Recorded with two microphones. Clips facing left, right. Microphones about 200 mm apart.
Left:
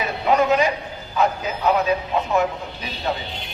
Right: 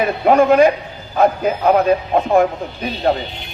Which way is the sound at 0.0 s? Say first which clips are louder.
Right 6 dB; 55° right (ahead or behind).